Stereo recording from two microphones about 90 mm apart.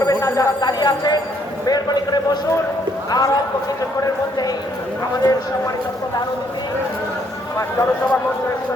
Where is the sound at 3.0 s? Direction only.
45° left (ahead or behind).